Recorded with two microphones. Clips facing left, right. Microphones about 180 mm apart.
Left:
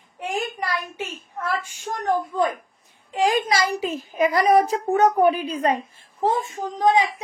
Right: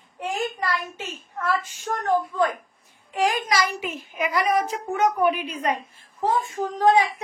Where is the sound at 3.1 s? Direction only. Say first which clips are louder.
Left 2 dB; 25° left (ahead or behind).